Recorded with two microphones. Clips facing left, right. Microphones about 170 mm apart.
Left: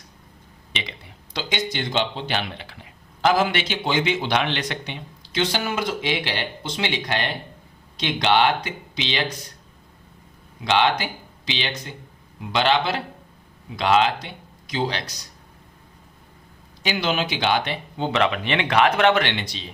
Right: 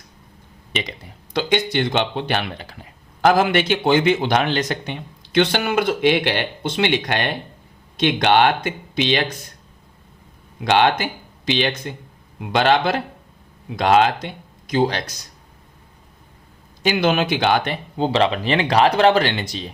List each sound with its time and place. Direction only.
0.7 s a man's voice: 45° right (ahead or behind)
5.3 s a man's voice: 60° right (ahead or behind)
10.6 s a man's voice: 50° right (ahead or behind)
16.8 s a man's voice: 50° right (ahead or behind)
18.0 s speech: 30° right (ahead or behind); by 19.7 s 45° right (ahead or behind)